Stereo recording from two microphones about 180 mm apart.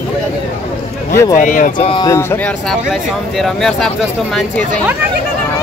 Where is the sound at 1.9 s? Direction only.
20° left (ahead or behind).